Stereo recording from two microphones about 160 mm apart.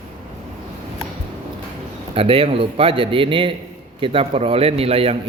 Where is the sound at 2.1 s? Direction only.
35° right (ahead or behind).